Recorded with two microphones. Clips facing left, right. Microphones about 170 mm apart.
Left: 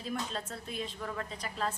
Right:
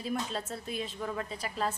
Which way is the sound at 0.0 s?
5° right (ahead or behind).